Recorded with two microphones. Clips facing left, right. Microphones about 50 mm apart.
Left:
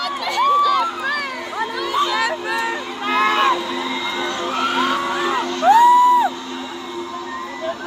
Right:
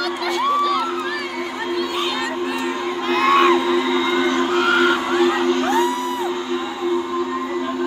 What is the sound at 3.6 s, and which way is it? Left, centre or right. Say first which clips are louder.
Music: right 5 dB; right.